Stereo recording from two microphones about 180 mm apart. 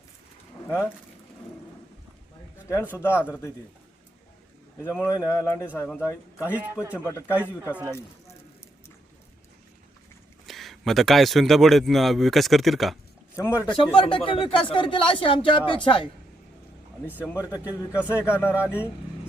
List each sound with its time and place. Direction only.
0.7 s a man's voice: 10° left (ahead or behind)
2.6 s a man's voice: 15° left (ahead or behind)
4.8 s a man's voice: 10° left (ahead or behind)
6.5 s a man's voice: 10° right (ahead or behind)
7.0 s a man's voice: 15° left (ahead or behind)
7.6 s a man's voice: 10° right (ahead or behind)
10.4 s speech: centre (ahead or behind)
13.3 s a man's voice: 15° left (ahead or behind)
13.9 s speech: 30° left (ahead or behind)
17.7 s a man's voice: 15° left (ahead or behind)
18.6 s a man's voice: 10° right (ahead or behind)